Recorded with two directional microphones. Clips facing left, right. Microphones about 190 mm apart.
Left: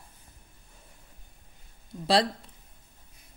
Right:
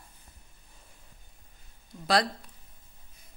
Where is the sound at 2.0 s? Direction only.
30° left (ahead or behind).